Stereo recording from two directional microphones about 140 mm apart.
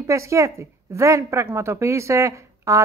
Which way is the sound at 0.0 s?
20° right (ahead or behind).